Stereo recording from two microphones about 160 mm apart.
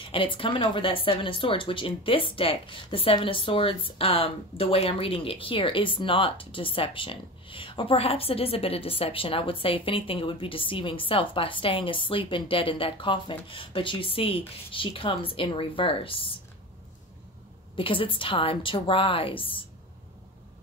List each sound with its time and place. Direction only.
0.0 s speech: 30° left (ahead or behind)
17.7 s speech: 35° left (ahead or behind)